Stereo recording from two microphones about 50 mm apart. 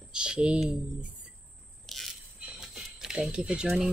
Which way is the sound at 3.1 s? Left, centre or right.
Centre.